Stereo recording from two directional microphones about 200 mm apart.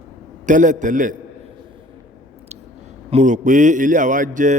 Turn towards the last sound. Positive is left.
turn(degrees=-40)  # may be behind; listen again after turning